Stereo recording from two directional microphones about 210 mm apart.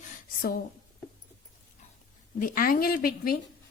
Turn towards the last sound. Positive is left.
turn(degrees=45)  # may be behind; listen again after turning